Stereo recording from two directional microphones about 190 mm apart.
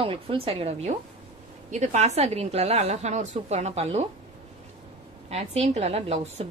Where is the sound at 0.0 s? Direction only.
30° right (ahead or behind).